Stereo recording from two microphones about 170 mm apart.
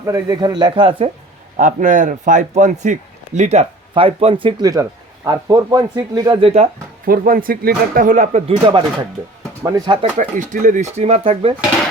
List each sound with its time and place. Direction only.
0.0 s speech: 20° right (ahead or behind)
1.5 s a man's voice: 50° right (ahead or behind)
4.6 s speech: 20° right (ahead or behind); by 6.7 s 35° right (ahead or behind)
7.0 s speech: 60° right (ahead or behind); by 8.5 s 45° right (ahead or behind)
9.6 s speech: 20° right (ahead or behind)
10.2 s speech: 50° right (ahead or behind)